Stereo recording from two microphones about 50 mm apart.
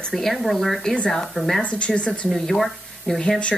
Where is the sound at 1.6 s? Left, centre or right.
Left.